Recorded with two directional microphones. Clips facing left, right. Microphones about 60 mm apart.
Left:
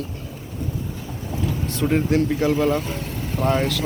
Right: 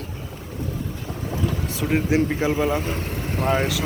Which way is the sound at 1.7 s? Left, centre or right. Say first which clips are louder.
Left 2 dB; centre.